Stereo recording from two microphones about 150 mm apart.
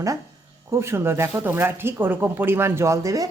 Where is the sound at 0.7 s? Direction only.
20° right (ahead or behind).